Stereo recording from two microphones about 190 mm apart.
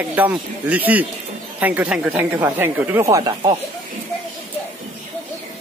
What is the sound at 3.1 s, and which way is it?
Speech, 20° right (ahead or behind).